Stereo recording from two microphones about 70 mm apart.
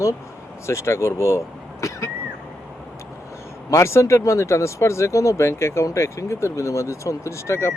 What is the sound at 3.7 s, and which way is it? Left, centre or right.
A man's voice, left.